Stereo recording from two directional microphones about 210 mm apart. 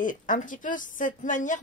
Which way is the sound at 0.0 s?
40° left (ahead or behind).